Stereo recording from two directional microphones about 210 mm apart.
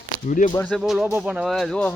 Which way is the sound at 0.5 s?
5° left (ahead or behind).